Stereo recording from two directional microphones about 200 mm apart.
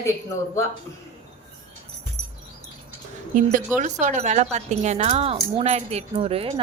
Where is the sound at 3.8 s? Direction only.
35° right (ahead or behind).